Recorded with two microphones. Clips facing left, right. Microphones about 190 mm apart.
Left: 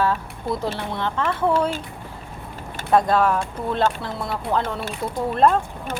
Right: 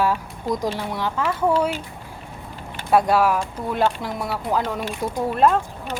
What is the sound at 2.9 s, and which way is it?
Speech, 10° right (ahead or behind).